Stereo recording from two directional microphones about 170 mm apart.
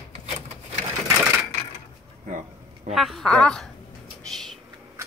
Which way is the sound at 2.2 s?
45° right (ahead or behind).